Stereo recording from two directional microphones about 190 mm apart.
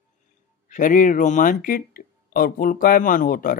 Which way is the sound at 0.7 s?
45° left (ahead or behind).